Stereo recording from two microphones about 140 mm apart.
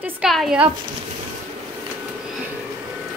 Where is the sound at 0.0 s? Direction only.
Centre (ahead or behind).